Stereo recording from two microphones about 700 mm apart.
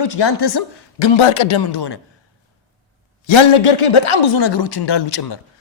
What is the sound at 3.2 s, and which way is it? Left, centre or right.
A man's voice, left.